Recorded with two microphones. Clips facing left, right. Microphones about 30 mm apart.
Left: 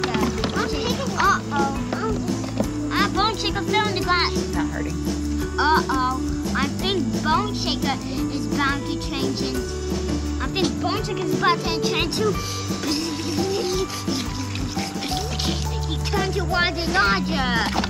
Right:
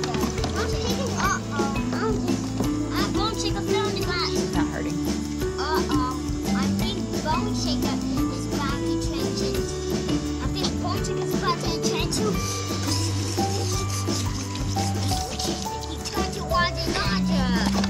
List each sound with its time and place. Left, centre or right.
0.0 s run: left
1.2 s music: left
3.0 s music: left
5.6 s speech: left
10.8 s speech: left
13.5 s music: left
16.2 s speech: left